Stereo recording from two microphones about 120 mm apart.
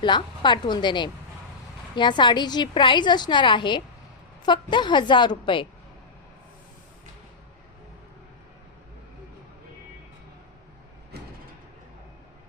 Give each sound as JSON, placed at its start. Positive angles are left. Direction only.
{"t": 0.0, "sound": "a woman's voice", "side_deg": 40}